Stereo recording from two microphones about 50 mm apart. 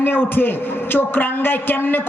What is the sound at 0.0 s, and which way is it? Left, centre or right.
A man's voice, left.